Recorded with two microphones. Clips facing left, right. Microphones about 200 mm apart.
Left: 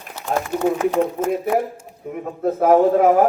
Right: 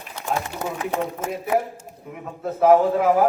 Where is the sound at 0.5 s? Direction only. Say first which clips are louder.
Left 10 dB; 50° left (ahead or behind).